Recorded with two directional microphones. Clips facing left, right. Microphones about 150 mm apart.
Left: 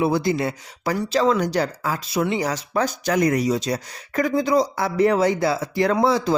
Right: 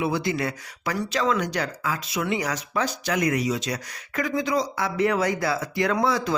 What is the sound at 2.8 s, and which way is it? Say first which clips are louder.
Speech: left 5 dB; 45° left (ahead or behind).